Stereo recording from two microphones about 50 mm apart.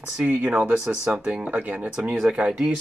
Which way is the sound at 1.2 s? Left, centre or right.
Right.